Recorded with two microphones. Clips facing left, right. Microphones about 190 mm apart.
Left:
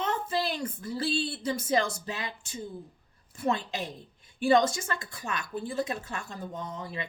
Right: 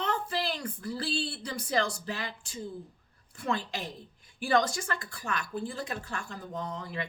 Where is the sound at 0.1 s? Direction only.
20° left (ahead or behind).